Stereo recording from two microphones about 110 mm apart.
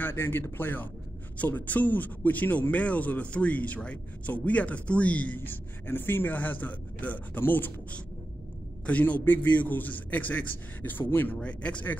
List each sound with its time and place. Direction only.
0.0 s a man's voice: 20° left (ahead or behind)